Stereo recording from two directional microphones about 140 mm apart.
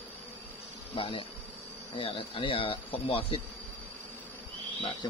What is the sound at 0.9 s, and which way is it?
Speech, 40° left (ahead or behind).